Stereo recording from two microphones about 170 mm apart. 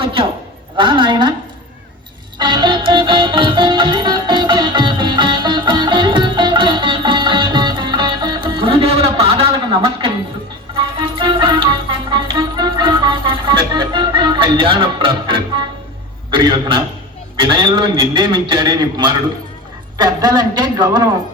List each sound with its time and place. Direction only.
0.0 s a woman's voice: 30° right (ahead or behind)
2.4 s music: 25° right (ahead or behind)
16.3 s a man's voice: 25° right (ahead or behind)